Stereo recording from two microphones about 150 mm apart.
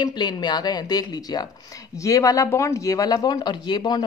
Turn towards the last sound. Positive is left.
turn(degrees=30)  # may be behind; listen again after turning